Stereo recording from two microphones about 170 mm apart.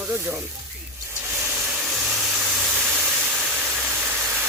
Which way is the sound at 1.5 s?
5° right (ahead or behind).